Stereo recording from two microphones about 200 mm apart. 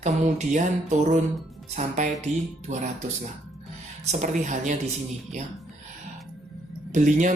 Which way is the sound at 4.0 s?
35° right (ahead or behind).